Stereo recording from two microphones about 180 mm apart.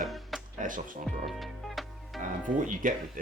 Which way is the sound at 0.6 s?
45° right (ahead or behind).